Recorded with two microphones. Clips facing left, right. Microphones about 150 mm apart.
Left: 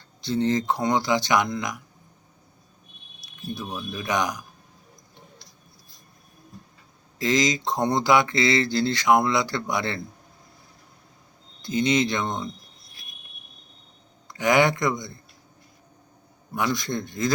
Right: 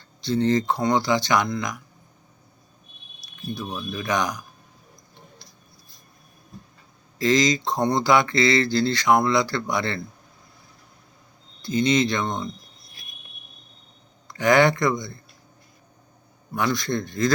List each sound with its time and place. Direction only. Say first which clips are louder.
0.3 s speech: right 2 dB; 10° left (ahead or behind)
3.9 s speech: right 1 dB; 15° left (ahead or behind)
7.2 s speech: right 3 dB; 15° left (ahead or behind)
11.6 s speech: right 2 dB; 15° left (ahead or behind)
14.3 s speech: right 2 dB; 15° left (ahead or behind)
16.6 s speech: right 2 dB; 15° left (ahead or behind)